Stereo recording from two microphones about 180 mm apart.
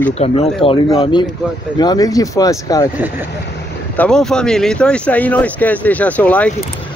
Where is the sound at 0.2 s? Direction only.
35° left (ahead or behind).